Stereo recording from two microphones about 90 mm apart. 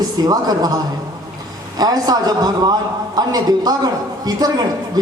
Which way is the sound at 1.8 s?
45° right (ahead or behind).